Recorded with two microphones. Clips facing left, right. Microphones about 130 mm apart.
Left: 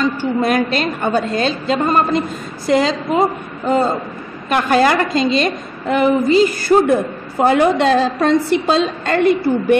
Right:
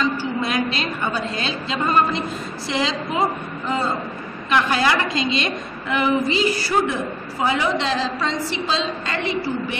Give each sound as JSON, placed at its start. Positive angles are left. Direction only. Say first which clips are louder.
{"t": 0.0, "sound": "a woman's voice", "louder": "left 6 dB", "side_deg": 50}